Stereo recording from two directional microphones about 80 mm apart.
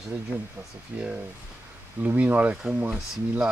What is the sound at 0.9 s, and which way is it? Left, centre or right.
Speech, right.